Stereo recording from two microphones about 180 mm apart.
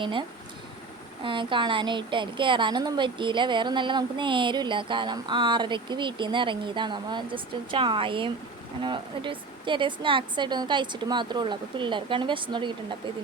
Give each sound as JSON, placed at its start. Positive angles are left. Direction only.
{"t": 0.0, "sound": "a woman's voice", "side_deg": -25}